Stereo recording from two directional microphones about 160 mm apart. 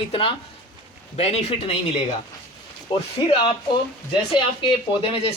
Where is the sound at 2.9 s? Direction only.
30° left (ahead or behind).